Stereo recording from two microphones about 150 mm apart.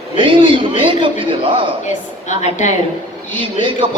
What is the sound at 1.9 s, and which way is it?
Speech, 50° left (ahead or behind).